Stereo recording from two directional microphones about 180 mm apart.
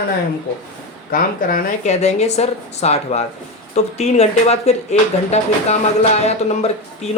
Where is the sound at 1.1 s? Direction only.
50° left (ahead or behind).